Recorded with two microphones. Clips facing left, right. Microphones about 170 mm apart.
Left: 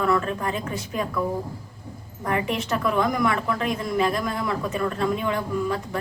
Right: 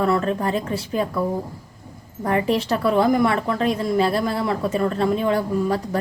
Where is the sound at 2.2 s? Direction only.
35° right (ahead or behind).